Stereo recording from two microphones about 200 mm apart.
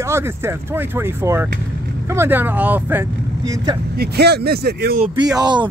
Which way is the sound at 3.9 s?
50° right (ahead or behind).